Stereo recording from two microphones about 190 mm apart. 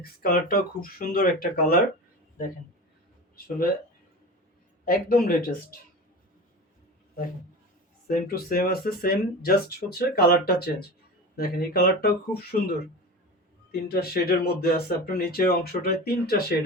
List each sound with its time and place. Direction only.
0.0 s speech: 50° left (ahead or behind)
4.9 s speech: 50° left (ahead or behind)
8.0 s speech: 50° left (ahead or behind)
13.7 s speech: 55° left (ahead or behind)